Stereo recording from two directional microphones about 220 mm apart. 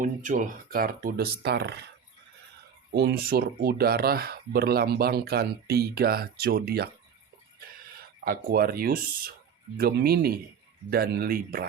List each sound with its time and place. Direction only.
0.0 s speech: 35° right (ahead or behind)
2.9 s speech: 45° right (ahead or behind)
8.2 s speech: 40° right (ahead or behind)